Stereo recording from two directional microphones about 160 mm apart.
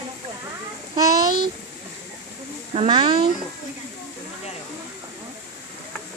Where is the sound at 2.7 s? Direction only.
35° right (ahead or behind).